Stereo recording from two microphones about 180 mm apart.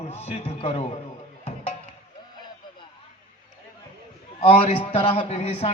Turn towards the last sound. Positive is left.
turn(degrees=35)  # may be behind; listen again after turning